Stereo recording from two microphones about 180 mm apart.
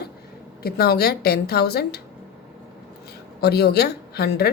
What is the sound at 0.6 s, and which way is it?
A woman's voice, 60° left (ahead or behind).